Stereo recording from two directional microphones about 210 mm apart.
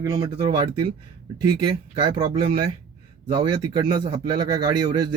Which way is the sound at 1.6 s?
20° right (ahead or behind).